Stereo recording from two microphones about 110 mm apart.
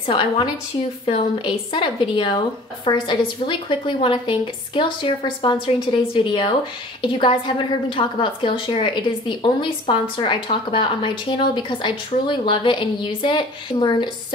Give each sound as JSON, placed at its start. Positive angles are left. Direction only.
{"t": 0.0, "sound": "a woman's voice", "side_deg": 55}